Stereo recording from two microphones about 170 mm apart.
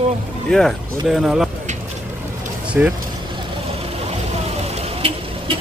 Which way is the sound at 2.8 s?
10° right (ahead or behind).